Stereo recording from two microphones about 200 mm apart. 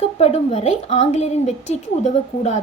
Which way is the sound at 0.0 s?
30° left (ahead or behind).